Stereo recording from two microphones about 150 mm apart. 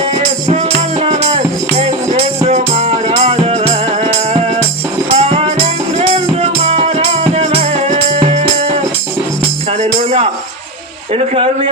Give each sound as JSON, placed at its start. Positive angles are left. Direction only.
{"t": 0.0, "sound": "music", "side_deg": -45}
{"t": 9.8, "sound": "music", "side_deg": -40}
{"t": 11.1, "sound": "speech", "side_deg": -40}